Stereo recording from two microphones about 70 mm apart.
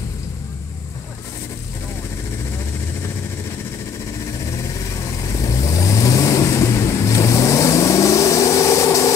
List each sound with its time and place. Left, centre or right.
5.0 s vehicle: left